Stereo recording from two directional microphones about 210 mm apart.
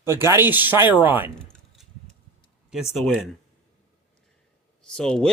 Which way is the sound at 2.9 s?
Centre (ahead or behind).